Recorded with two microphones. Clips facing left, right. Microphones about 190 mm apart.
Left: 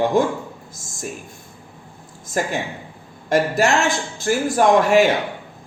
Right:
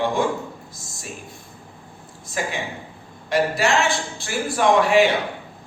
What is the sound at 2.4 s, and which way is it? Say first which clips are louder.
Speech: left 4 dB; 45° left (ahead or behind).